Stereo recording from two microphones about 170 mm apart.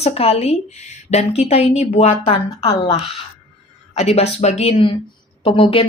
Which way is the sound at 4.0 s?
40° left (ahead or behind).